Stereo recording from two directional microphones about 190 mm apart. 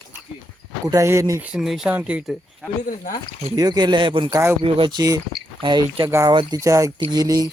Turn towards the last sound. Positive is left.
turn(degrees=-20)  # may be behind; listen again after turning